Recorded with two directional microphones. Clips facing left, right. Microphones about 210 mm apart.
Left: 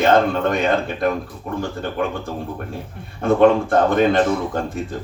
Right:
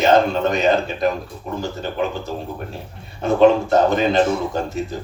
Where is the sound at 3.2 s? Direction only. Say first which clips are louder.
Even; 55° left (ahead or behind).